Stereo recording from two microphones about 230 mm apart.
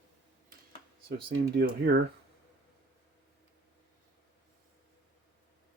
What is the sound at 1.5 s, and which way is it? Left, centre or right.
Speech, right.